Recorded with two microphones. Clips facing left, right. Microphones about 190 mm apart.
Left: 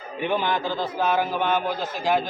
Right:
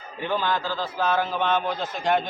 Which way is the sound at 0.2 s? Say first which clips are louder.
Left 2 dB; 15° left (ahead or behind).